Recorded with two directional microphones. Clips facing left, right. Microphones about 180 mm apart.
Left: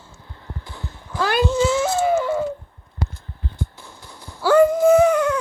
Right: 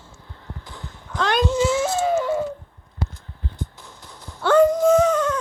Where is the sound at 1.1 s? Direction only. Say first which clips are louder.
Left 1 dB; 5° left (ahead or behind).